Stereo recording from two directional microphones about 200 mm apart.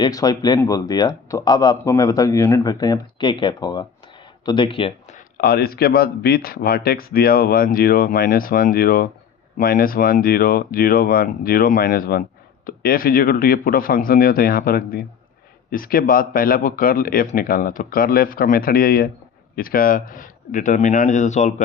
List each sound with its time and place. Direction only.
0.0 s speech: 20° left (ahead or behind)
5.4 s a man's voice: 50° left (ahead or behind)